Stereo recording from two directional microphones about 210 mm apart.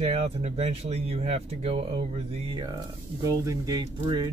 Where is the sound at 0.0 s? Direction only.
30° right (ahead or behind).